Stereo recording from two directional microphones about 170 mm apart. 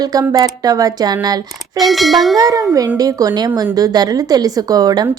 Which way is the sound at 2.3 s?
20° right (ahead or behind).